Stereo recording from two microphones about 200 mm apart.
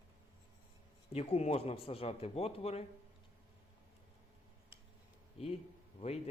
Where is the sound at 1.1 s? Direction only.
30° left (ahead or behind).